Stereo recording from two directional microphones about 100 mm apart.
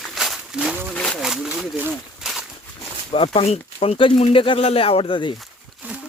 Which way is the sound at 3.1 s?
80° left.